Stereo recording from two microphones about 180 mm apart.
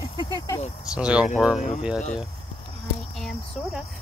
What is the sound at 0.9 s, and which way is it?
Speech, 5° right (ahead or behind).